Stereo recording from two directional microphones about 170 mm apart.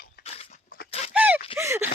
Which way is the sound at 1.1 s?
10° right (ahead or behind).